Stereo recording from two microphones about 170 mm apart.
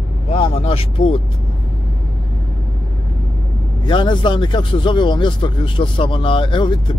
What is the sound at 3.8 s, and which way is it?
A man's voice, 30° left (ahead or behind).